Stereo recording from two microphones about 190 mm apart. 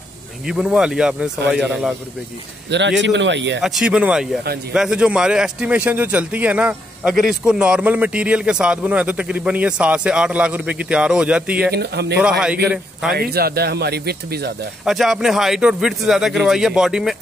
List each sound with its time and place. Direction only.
0.5 s a man's voice: 5° right (ahead or behind)
3.0 s speech: 70° right (ahead or behind)
3.6 s a man's voice: 5° right (ahead or behind)
11.7 s speech: 60° right (ahead or behind)
12.2 s a man's voice: 5° right (ahead or behind)
13.1 s speech: 55° right (ahead or behind)
14.9 s a man's voice: centre (ahead or behind)